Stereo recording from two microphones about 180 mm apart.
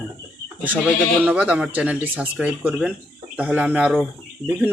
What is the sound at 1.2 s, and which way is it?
Speech, 5° right (ahead or behind).